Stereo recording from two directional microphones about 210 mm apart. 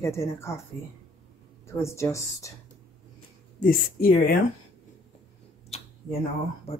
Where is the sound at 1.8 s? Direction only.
15° left (ahead or behind).